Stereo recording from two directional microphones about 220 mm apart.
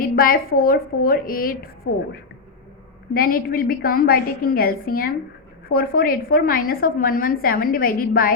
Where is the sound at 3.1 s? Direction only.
40° left (ahead or behind).